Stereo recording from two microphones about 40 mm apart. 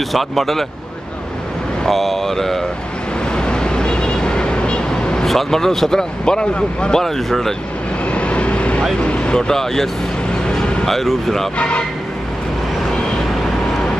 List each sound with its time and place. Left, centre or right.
0.1 s speech: centre
1.9 s speech: centre
3.3 s vehicle: left
5.2 s speech: centre; by 7.0 s left
7.0 s speech: centre
8.1 s vehicle: left
9.0 s speech: left
9.5 s speech: centre
10.9 s speech: centre
11.5 s speech: left